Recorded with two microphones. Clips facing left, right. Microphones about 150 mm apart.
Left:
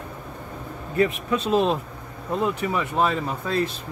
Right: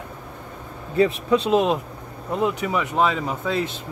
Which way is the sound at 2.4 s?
10° right (ahead or behind).